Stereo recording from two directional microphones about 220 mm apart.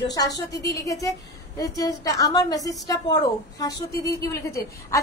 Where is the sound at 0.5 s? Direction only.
15° left (ahead or behind).